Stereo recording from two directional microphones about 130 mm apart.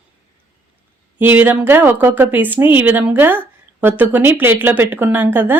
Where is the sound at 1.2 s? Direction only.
15° right (ahead or behind).